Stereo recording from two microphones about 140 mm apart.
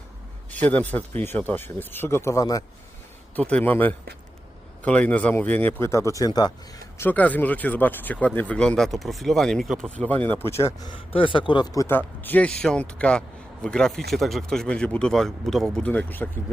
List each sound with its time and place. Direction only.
0.5 s speech: 10° left (ahead or behind)
3.3 s speech: 10° left (ahead or behind); by 6.5 s 25° left (ahead or behind)
7.0 s speech: 10° left (ahead or behind)
10.8 s speech: 40° left (ahead or behind); by 16.3 s 10° left (ahead or behind)